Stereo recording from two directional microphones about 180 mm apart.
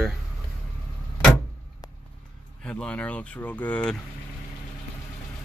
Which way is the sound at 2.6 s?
5° left (ahead or behind).